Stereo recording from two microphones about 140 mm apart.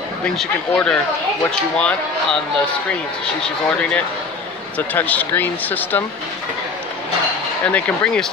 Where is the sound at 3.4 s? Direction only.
5° left (ahead or behind).